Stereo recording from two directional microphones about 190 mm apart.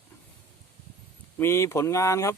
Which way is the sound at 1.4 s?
15° left (ahead or behind).